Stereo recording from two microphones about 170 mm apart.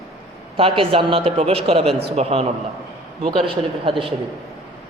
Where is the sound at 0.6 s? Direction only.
30° right (ahead or behind).